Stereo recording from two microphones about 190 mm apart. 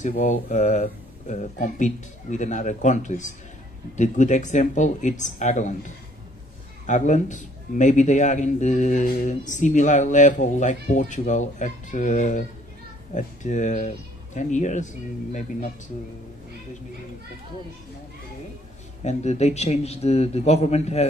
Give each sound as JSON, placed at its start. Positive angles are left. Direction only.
{"t": 0.0, "sound": "a man's voice", "side_deg": 40}
{"t": 6.9, "sound": "a man's voice", "side_deg": 40}
{"t": 19.0, "sound": "a man's voice", "side_deg": 35}